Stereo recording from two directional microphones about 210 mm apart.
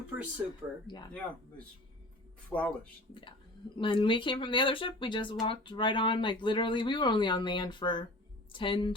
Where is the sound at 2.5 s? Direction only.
5° left (ahead or behind).